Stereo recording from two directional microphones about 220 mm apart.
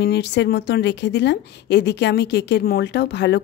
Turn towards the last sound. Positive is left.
turn(degrees=50)  # may be behind; listen again after turning